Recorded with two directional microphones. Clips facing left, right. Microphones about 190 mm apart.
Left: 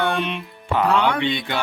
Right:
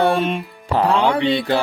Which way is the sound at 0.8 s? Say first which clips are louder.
Right 3 dB; 30° right (ahead or behind).